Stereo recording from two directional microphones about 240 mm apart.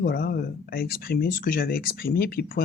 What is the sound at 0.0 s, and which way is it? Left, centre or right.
Speech, left.